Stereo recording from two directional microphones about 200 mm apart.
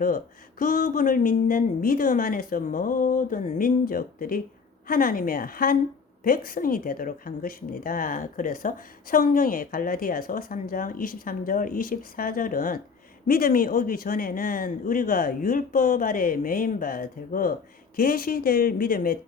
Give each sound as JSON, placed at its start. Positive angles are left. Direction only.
{"t": 0.6, "sound": "a woman's voice", "side_deg": 45}